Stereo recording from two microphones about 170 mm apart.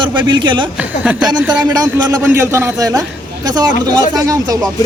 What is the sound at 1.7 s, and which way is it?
Speech, 20° right (ahead or behind).